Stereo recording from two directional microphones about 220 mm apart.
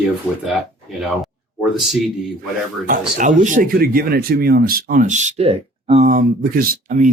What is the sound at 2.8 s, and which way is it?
Speech, 35° right (ahead or behind).